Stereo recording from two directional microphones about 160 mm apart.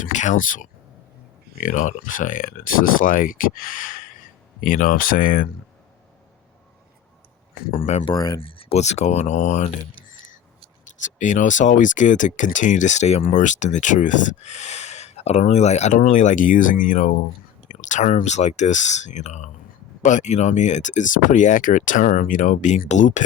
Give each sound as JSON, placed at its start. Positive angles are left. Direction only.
{"t": 0.0, "sound": "speech", "side_deg": 50}
{"t": 7.8, "sound": "speech", "side_deg": 40}
{"t": 8.1, "sound": "speech", "side_deg": 25}
{"t": 11.0, "sound": "speech", "side_deg": 50}